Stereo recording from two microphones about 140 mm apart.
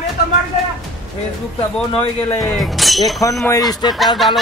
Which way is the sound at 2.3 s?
Centre (ahead or behind).